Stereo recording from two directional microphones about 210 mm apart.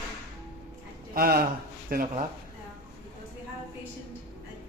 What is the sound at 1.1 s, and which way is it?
Speech, 45° right (ahead or behind).